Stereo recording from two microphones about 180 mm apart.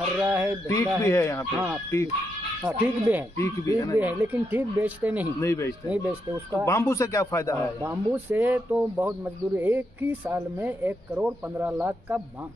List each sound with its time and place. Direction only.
0.2 s speech: 10° right (ahead or behind)
0.7 s speech: 15° left (ahead or behind)
2.6 s speech: 10° right (ahead or behind)
3.3 s speech: 15° left (ahead or behind)
4.0 s speech: 10° right (ahead or behind)
5.4 s speech: 15° left (ahead or behind)
5.9 s speech: 10° right (ahead or behind)
6.6 s speech: 15° left (ahead or behind)
7.8 s speech: 10° right (ahead or behind)